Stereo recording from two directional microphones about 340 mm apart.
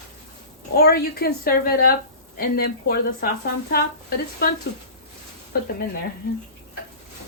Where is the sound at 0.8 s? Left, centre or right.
Left.